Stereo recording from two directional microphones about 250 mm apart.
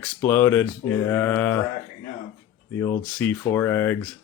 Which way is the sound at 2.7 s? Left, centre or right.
Centre.